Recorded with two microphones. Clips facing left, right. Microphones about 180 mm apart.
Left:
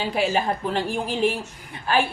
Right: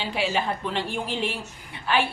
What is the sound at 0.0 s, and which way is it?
A woman's voice, 45° left (ahead or behind).